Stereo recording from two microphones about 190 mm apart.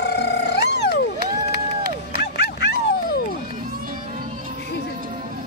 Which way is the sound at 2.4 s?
60° left (ahead or behind).